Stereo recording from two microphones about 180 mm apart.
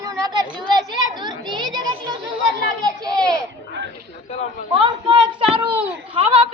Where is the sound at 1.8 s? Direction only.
25° right (ahead or behind).